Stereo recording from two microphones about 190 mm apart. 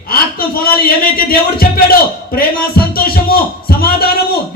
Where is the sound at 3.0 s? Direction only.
55° left (ahead or behind).